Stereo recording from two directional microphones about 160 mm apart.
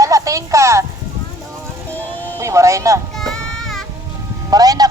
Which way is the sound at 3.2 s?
Centre (ahead or behind).